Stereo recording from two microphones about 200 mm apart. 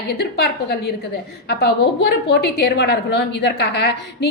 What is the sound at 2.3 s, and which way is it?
A woman's voice, 55° left (ahead or behind).